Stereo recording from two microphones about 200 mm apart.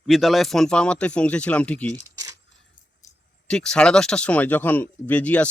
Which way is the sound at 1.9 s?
20° right (ahead or behind).